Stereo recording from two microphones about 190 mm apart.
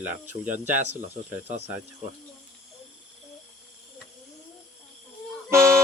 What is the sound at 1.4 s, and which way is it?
Speech, 35° right (ahead or behind).